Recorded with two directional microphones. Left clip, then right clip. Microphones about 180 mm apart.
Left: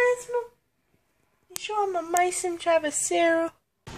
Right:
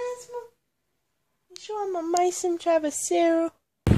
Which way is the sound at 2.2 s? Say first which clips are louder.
Right 1 dB; 40° right (ahead or behind).